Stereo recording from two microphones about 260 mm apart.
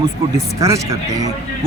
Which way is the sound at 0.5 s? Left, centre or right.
Centre.